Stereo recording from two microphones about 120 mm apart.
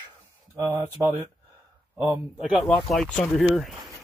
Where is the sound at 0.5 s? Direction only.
25° right (ahead or behind).